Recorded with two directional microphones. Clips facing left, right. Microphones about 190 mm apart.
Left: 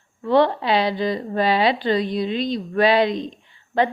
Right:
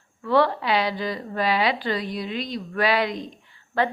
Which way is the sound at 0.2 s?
25° left (ahead or behind).